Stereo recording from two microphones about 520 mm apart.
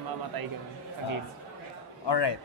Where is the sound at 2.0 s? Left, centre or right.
Left.